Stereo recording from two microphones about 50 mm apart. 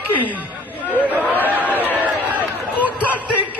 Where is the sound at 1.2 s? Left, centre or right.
Left.